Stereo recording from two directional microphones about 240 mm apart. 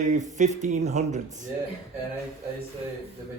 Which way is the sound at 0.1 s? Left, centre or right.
Right.